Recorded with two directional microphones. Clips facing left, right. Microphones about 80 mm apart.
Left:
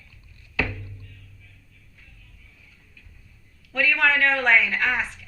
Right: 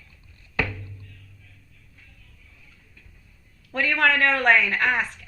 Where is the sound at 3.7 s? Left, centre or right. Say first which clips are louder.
Even; right.